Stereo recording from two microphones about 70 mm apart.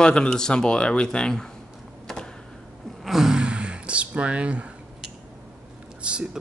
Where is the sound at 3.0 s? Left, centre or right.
Centre.